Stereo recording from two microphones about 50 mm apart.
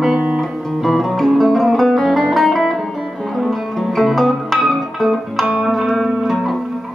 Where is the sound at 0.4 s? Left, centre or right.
Centre.